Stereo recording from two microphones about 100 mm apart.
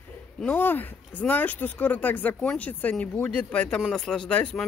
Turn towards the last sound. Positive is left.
turn(degrees=10)  # may be behind; listen again after turning